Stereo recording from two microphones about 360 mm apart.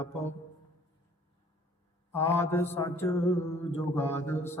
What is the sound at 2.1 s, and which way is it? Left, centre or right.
A man's voice, centre.